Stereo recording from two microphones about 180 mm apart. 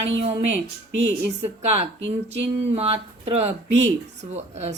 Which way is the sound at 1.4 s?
35° right (ahead or behind).